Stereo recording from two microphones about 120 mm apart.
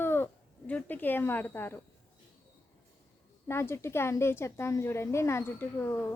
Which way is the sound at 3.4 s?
20° left (ahead or behind).